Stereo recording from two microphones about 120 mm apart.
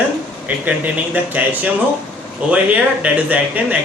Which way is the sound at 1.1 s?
15° right (ahead or behind).